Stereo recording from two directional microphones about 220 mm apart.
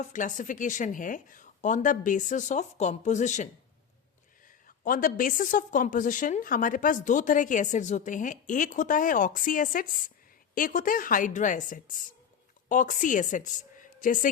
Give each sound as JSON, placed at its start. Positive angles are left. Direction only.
{"t": 0.0, "sound": "a woman's voice", "side_deg": 35}
{"t": 4.8, "sound": "a woman's voice", "side_deg": 40}